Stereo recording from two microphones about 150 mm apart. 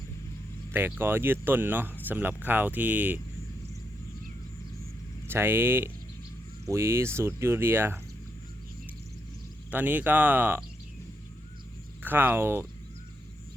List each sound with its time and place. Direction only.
0.7 s speech: 15° right (ahead or behind)
5.3 s speech: 15° right (ahead or behind)
9.7 s speech: 10° right (ahead or behind)
12.0 s speech: 15° right (ahead or behind)